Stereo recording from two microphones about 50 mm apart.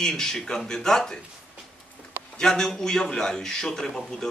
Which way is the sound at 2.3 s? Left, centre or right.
Centre.